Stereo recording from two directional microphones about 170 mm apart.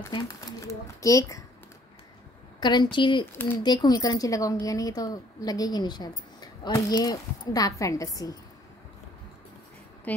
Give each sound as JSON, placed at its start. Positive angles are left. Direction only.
{"t": 0.1, "sound": "a woman's voice", "side_deg": 20}
{"t": 2.6, "sound": "a woman's voice", "side_deg": 25}
{"t": 10.1, "sound": "a woman's voice", "side_deg": 10}